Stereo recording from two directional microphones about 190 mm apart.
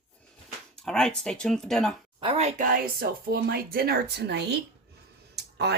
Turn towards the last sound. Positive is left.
turn(degrees=-60)  # may be behind; listen again after turning